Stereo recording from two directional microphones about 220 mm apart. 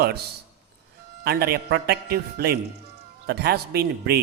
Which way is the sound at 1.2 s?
45° right (ahead or behind).